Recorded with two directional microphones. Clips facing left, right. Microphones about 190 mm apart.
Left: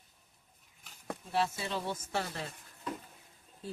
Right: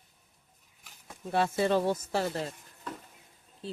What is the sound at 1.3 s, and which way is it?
Speech, 55° right (ahead or behind).